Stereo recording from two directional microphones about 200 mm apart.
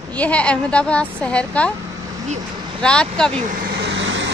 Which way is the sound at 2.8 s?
5° left (ahead or behind).